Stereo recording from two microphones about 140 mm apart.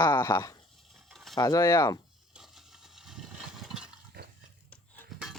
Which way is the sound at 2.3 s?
Centre (ahead or behind).